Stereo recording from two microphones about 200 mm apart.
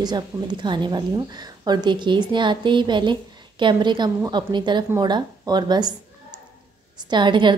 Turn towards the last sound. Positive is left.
turn(degrees=-25)  # may be behind; listen again after turning